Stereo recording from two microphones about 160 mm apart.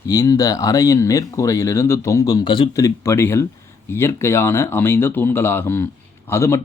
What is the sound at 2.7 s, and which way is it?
Speech, 20° left (ahead or behind).